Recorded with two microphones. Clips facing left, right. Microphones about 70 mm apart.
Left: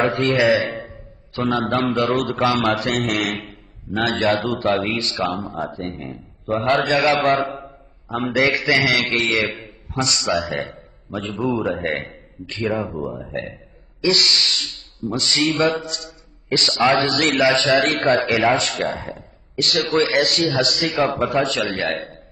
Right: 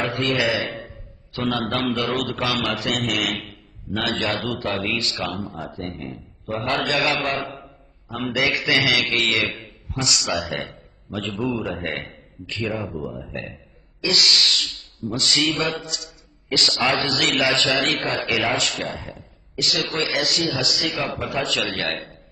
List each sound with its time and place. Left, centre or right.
0.0 s a sound: left
1.5 s a man's voice: left
2.6 s a man's voice: left
11.4 s a man's voice: left
14.0 s a sound: left
15.1 s a man's voice: left
17.4 s a man's voice: left
18.7 s a man's voice: left
20.9 s a man's voice: left